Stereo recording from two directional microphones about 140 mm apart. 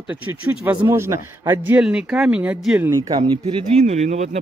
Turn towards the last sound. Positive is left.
turn(degrees=-55)  # may be behind; listen again after turning